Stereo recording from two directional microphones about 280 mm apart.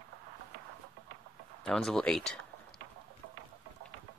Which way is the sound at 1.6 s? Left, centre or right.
Centre.